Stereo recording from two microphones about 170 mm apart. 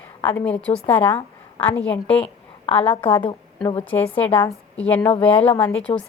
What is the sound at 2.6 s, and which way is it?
Speech, 35° left (ahead or behind).